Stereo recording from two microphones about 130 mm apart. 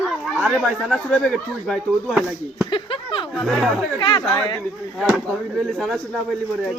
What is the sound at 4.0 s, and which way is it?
Speech, 35° left (ahead or behind).